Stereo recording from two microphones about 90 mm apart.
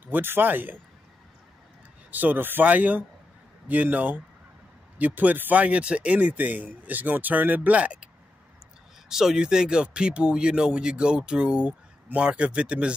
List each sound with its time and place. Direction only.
0.1 s speech: 20° right (ahead or behind)
2.0 s speech: 20° right (ahead or behind)
9.1 s speech: 5° right (ahead or behind)